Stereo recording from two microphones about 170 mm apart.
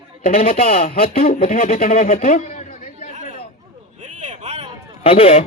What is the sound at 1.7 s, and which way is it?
Speech, 55° left (ahead or behind).